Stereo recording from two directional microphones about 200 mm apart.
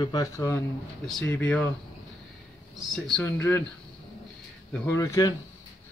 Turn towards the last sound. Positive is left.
turn(degrees=15)  # may be behind; listen again after turning